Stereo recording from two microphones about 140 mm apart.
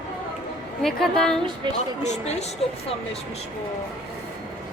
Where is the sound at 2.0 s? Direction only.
55° left (ahead or behind).